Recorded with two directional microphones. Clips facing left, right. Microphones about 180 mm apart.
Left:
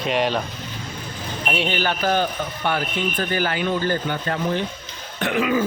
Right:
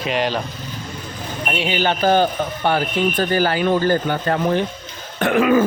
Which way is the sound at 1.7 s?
20° right (ahead or behind).